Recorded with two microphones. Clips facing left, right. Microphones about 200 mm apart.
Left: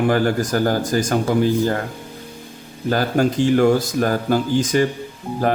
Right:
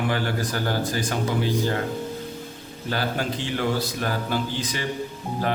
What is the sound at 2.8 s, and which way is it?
Speech, 45° left (ahead or behind).